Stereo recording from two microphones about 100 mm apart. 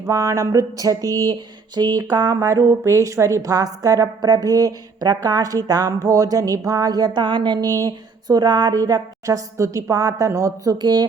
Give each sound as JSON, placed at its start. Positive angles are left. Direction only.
{"t": 0.0, "sound": "a woman's voice", "side_deg": -35}
{"t": 1.3, "sound": "a sound", "side_deg": -45}
{"t": 2.4, "sound": "a woman's voice", "side_deg": -30}
{"t": 7.7, "sound": "a woman's voice", "side_deg": -35}